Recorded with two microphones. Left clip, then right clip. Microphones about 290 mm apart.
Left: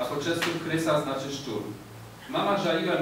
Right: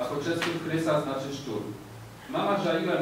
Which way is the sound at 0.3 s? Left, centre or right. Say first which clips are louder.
Left 1 dB; centre.